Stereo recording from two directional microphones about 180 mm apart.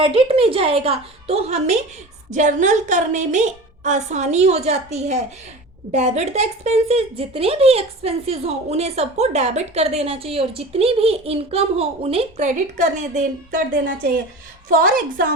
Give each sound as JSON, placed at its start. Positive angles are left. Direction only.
{"t": 0.0, "sound": "speech", "side_deg": -30}
{"t": 14.7, "sound": "a woman's voice", "side_deg": -55}